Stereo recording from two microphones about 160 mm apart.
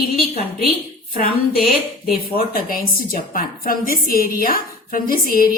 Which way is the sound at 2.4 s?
65° left (ahead or behind).